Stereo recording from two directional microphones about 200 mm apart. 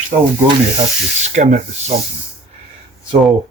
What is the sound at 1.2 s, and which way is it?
Rub, 35° right (ahead or behind).